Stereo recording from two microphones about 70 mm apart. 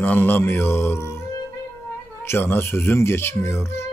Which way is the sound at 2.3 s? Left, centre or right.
Left.